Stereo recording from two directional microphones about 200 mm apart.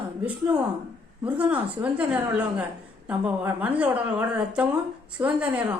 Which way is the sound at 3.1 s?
10° right (ahead or behind).